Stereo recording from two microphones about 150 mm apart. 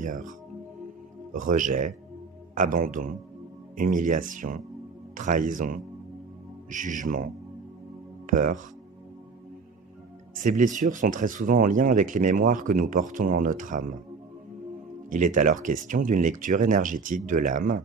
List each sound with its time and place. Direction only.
0.0 s speech: 60° right (ahead or behind)
1.3 s speech: 60° right (ahead or behind)
8.3 s speech: 60° right (ahead or behind)
10.4 s speech: 60° right (ahead or behind)
15.0 s speech: 60° right (ahead or behind)